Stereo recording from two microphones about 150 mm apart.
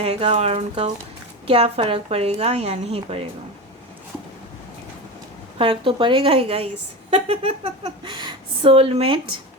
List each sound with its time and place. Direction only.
0.0 s a woman's voice: 40° right (ahead or behind)
5.5 s a woman's voice: 35° right (ahead or behind)